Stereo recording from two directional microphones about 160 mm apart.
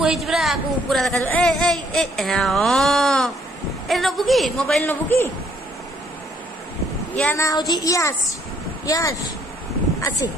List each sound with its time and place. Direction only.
0.0 s speech: 5° right (ahead or behind); by 5.3 s 15° left (ahead or behind)
7.3 s speech: 20° left (ahead or behind)